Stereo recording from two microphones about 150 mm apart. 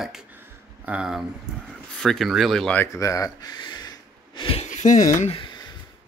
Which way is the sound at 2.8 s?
20° left (ahead or behind).